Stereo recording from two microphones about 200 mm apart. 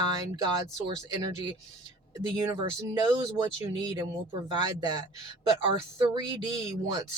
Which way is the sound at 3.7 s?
20° right (ahead or behind).